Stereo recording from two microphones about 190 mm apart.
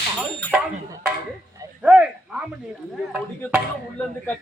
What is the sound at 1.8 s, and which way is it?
Speech, 5° right (ahead or behind).